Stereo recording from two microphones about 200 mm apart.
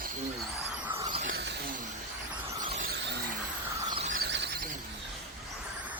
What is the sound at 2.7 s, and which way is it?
Vehicle, 40° right (ahead or behind).